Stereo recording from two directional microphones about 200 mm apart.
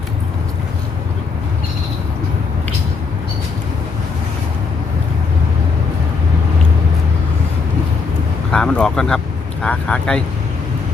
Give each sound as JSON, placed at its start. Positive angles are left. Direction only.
{"t": 8.5, "sound": "speech", "side_deg": 5}